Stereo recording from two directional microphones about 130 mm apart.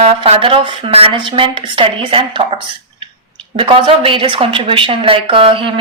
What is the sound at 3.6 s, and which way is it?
Speech, 40° right (ahead or behind).